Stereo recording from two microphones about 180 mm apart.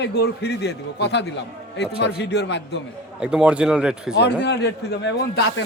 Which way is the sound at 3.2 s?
5° right (ahead or behind).